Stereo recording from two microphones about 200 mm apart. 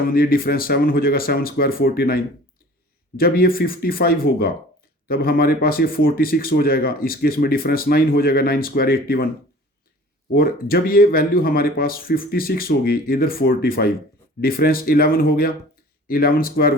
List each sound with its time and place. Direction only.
0.1 s speech: 45° left (ahead or behind)
10.3 s speech: 45° left (ahead or behind)